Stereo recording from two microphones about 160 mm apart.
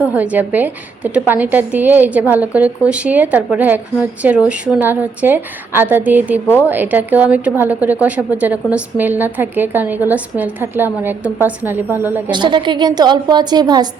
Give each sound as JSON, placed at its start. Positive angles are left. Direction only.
{"t": 0.0, "sound": "a woman's voice", "side_deg": -10}
{"t": 12.3, "sound": "a woman's voice", "side_deg": -30}